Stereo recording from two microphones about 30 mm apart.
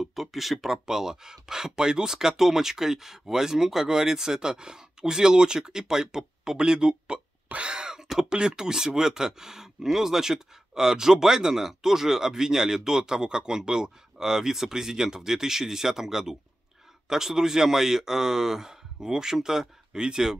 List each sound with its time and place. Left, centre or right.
0.0 s speech: centre
0.7 s speech: centre
4.4 s speech: right
7.7 s a sound: right
8.3 s speech: right